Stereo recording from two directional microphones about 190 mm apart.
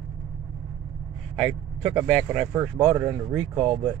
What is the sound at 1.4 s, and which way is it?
Speech, 25° right (ahead or behind).